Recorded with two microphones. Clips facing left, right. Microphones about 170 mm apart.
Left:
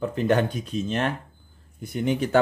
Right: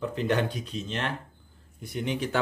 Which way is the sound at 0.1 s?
50° left (ahead or behind).